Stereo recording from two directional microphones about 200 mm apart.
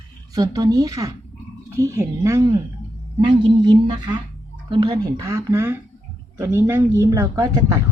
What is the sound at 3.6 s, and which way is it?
A woman's voice, 20° right (ahead or behind).